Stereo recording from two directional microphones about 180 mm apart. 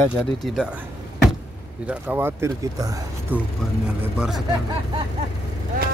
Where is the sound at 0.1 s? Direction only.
5° right (ahead or behind).